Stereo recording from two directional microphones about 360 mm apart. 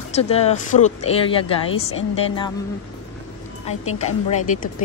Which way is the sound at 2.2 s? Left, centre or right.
Centre.